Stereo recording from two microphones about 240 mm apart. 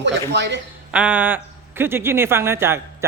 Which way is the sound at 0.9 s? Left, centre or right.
Centre.